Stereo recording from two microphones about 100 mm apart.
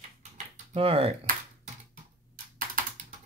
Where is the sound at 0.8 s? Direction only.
75° right (ahead or behind).